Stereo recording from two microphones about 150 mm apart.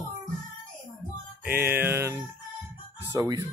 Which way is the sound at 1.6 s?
15° right (ahead or behind).